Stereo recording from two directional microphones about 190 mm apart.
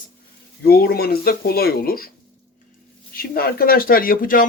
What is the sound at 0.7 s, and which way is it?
Speech, 55° left (ahead or behind).